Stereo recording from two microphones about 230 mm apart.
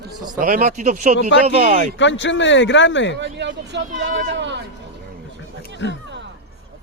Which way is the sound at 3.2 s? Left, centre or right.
Right.